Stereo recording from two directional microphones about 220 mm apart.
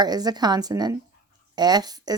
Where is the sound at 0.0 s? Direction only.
20° right (ahead or behind).